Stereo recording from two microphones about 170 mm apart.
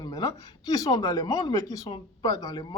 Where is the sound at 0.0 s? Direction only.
20° left (ahead or behind).